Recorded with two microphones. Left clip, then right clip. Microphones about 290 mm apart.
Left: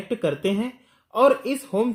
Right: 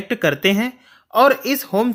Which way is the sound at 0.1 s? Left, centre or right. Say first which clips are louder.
Right 7 dB; right.